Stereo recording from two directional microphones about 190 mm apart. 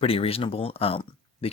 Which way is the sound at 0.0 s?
30° left (ahead or behind).